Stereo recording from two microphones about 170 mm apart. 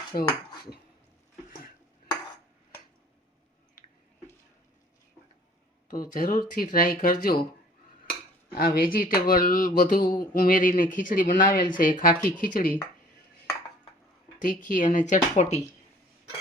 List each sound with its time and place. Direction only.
0.1 s speech: 55° left (ahead or behind)
5.9 s speech: 55° left (ahead or behind)
8.5 s speech: 60° left (ahead or behind)
14.3 s speech: 50° left (ahead or behind)